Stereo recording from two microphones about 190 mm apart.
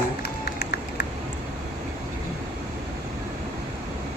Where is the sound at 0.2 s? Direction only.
55° left (ahead or behind).